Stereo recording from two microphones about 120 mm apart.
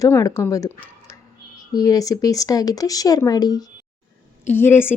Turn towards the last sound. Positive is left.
turn(degrees=20)  # may be behind; listen again after turning